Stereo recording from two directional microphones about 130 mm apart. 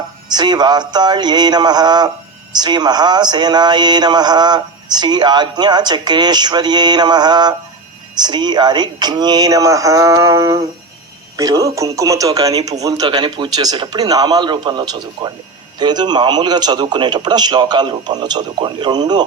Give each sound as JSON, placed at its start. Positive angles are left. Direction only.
{"t": 0.3, "sound": "speech", "side_deg": -35}